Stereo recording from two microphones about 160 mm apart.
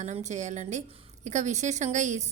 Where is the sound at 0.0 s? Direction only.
45° right (ahead or behind).